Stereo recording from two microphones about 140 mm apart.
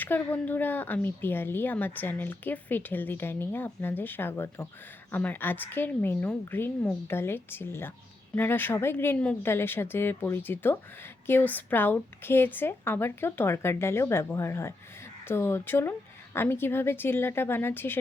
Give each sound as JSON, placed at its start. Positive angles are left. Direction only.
{"t": 0.0, "sound": "speech", "side_deg": 15}